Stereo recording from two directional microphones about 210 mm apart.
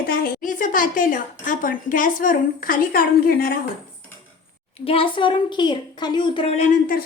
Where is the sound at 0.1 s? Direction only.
40° left (ahead or behind).